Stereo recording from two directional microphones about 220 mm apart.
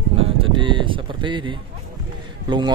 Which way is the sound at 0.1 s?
25° right (ahead or behind).